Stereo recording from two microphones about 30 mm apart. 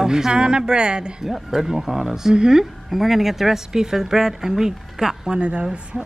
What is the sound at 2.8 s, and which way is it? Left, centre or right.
Speech, centre.